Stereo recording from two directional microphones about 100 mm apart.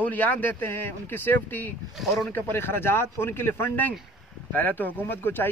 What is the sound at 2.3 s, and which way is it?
Speech, 20° left (ahead or behind).